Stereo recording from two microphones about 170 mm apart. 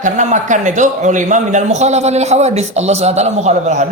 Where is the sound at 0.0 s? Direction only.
45° right (ahead or behind).